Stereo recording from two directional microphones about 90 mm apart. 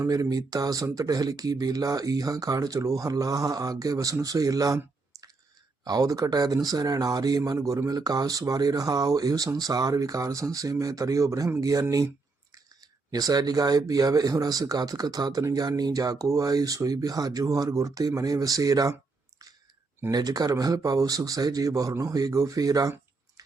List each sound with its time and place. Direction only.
0.0 s speech: 40° right (ahead or behind)
5.8 s speech: 45° right (ahead or behind)
20.1 s speech: 45° right (ahead or behind)